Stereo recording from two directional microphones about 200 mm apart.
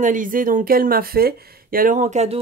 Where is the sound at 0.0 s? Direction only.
40° right (ahead or behind).